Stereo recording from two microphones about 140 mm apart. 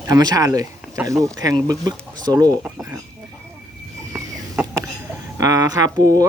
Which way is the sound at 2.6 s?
10° right (ahead or behind).